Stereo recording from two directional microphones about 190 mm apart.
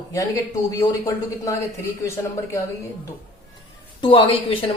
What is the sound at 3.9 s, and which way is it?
Speech, 30° left (ahead or behind).